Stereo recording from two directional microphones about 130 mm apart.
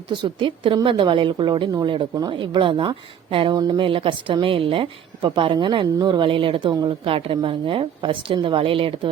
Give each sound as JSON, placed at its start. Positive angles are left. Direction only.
{"t": 0.1, "sound": "a woman's voice", "side_deg": -40}